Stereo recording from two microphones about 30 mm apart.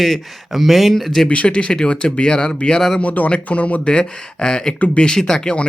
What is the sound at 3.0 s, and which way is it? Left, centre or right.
Speech, left.